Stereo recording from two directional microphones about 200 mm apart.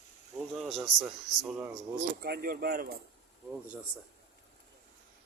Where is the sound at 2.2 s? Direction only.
50° right (ahead or behind).